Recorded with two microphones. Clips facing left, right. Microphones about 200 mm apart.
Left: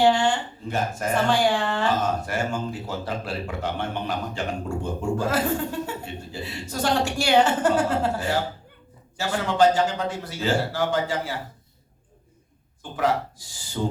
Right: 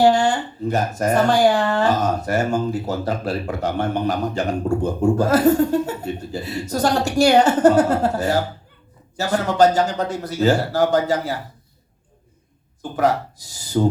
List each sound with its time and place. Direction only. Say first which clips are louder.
0.0 s speech: right 4 dB; 40° right (ahead or behind)
12.8 s speech: right 5 dB; 40° right (ahead or behind)